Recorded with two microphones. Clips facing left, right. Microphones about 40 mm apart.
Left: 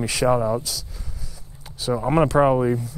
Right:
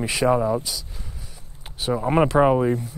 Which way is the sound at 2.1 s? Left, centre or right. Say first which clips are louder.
Even; right.